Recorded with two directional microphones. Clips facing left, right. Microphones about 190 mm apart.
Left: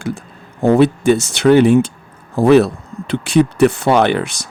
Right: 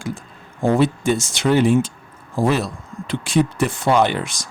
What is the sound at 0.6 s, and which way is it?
Speech, 65° left (ahead or behind).